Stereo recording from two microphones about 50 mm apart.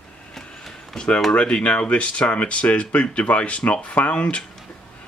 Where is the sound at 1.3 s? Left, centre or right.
Left.